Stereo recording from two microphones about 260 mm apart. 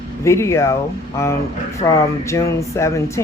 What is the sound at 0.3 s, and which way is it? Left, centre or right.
Speech, centre.